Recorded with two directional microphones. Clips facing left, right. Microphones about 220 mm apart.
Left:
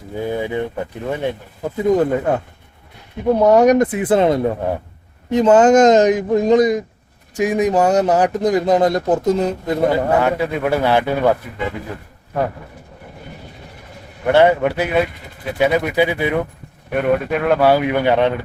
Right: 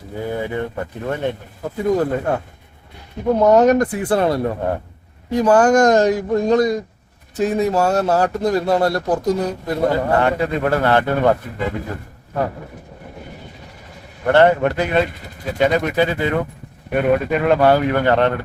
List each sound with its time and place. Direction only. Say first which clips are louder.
0.2 s speech: left 2 dB; 15° left (ahead or behind)
9.9 s speech: left 1 dB; 5° left (ahead or behind)
14.3 s speech: even; 10° left (ahead or behind)
16.9 s speech: right 1 dB; centre (ahead or behind)